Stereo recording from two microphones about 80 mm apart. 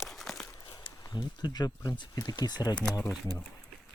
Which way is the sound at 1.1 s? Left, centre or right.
Left.